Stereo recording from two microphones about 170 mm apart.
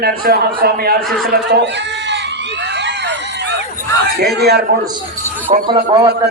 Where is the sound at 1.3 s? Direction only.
85° right.